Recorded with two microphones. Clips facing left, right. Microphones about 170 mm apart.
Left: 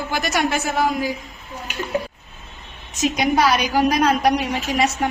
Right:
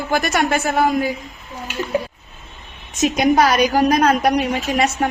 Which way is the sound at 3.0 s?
50° right (ahead or behind).